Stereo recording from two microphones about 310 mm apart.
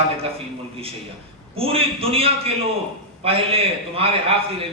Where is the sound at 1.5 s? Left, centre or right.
Centre.